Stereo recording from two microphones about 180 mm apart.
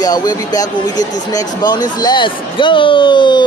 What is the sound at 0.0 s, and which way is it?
Speech, 20° left (ahead or behind).